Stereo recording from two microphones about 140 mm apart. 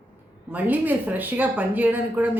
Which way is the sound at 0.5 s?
10° right (ahead or behind).